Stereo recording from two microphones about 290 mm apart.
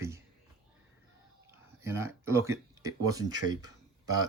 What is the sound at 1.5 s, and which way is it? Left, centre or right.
Speech, centre.